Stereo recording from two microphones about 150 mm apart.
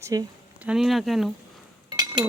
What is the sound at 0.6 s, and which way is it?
Speech, centre (ahead or behind).